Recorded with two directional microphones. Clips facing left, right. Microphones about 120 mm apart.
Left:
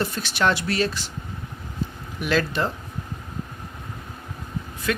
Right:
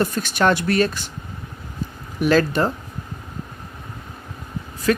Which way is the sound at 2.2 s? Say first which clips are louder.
Right 6 dB; 45° right (ahead or behind).